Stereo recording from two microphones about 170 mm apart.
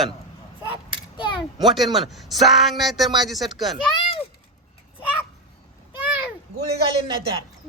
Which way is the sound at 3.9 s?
30° left (ahead or behind).